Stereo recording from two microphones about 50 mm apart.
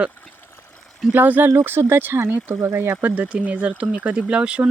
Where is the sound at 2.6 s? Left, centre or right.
Right.